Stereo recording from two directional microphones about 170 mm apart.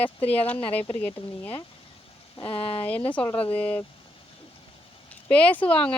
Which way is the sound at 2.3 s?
30° left (ahead or behind).